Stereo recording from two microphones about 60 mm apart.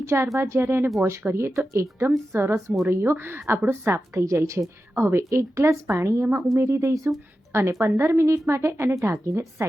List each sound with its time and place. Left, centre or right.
0.0 s a woman's voice: right
2.0 s a woman's voice: right
4.9 s a woman's voice: right
7.5 s a woman's voice: right